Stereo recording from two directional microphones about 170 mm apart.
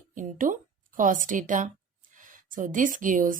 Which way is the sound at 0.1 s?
50° right (ahead or behind).